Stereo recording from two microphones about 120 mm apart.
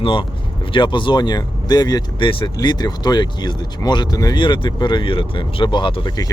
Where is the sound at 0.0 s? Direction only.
45° left (ahead or behind).